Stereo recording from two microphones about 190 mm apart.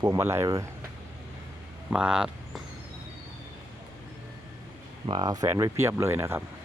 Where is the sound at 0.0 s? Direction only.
15° right (ahead or behind).